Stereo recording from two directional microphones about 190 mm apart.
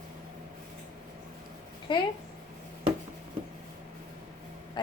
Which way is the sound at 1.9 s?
25° left (ahead or behind).